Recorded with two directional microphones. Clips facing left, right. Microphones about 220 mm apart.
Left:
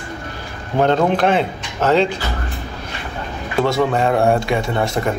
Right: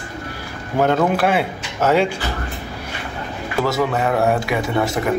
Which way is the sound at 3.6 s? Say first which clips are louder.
Left 2 dB; 30° left (ahead or behind).